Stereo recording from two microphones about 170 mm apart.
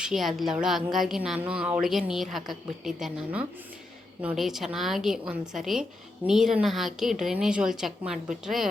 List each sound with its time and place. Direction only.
0.0 s a woman's voice: centre (ahead or behind)